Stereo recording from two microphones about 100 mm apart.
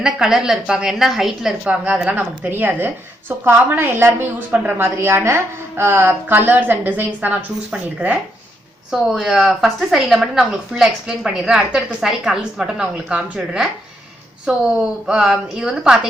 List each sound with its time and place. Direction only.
0.0 s a woman's voice: 5° right (ahead or behind)
8.9 s a woman's voice: 5° right (ahead or behind)
15.0 s a woman's voice: 5° right (ahead or behind)